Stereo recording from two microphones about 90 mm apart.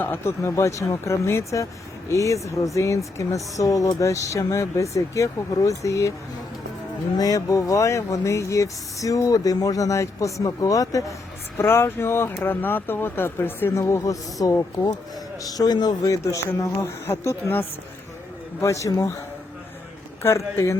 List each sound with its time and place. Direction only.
0.0 s speech: 25° left (ahead or behind)
7.2 s speech: 40° left (ahead or behind)
11.5 s speech: 25° left (ahead or behind)
18.6 s speech: 35° left (ahead or behind)
20.2 s speech: 30° left (ahead or behind)